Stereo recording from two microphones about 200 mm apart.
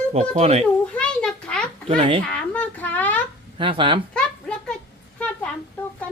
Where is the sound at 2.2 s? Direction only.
5° left (ahead or behind).